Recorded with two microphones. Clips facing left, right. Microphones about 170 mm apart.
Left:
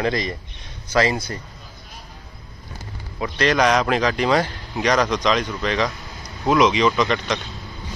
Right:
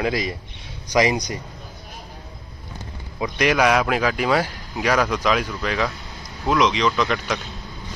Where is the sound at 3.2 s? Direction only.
10° right (ahead or behind).